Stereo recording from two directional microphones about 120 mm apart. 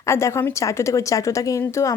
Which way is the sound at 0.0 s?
25° left (ahead or behind).